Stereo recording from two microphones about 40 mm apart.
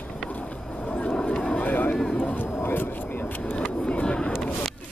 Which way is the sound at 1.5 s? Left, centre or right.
Left.